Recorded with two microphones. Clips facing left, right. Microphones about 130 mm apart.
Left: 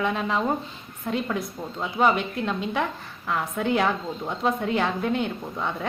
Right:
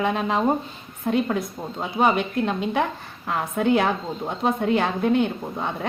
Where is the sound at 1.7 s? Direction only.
20° right (ahead or behind).